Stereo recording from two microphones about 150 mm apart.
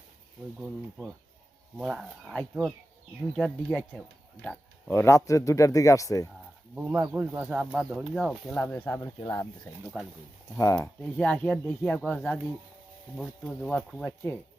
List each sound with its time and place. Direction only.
1.8 s speech: centre (ahead or behind); by 6.3 s 20° left (ahead or behind)
6.7 s speech: 15° right (ahead or behind); by 9.7 s 25° left (ahead or behind)
10.0 s speech: 5° left (ahead or behind)
10.6 s speech: 20° left (ahead or behind)
11.2 s speech: 5° left (ahead or behind)